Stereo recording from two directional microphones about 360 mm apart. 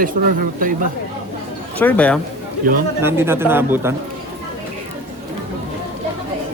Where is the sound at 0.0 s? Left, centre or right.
Right.